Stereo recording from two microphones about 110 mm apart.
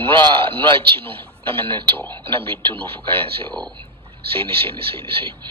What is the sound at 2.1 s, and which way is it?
Speech, 55° right (ahead or behind).